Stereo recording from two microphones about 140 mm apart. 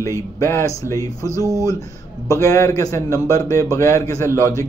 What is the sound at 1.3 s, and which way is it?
Speech, 20° right (ahead or behind).